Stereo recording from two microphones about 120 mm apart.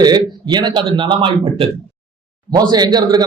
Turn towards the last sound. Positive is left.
turn(degrees=-35)  # may be behind; listen again after turning